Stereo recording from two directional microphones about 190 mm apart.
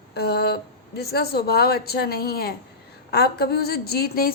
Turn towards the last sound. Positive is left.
turn(degrees=55)  # may be behind; listen again after turning